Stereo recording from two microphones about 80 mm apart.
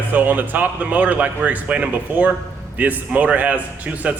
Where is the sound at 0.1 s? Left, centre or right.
Right.